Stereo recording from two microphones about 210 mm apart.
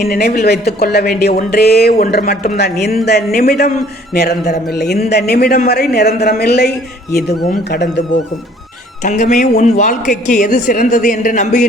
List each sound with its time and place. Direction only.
0.0 s speech: 50° left (ahead or behind)
9.0 s a woman's voice: 35° left (ahead or behind)